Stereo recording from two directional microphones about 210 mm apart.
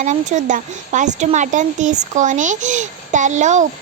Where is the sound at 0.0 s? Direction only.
35° right (ahead or behind).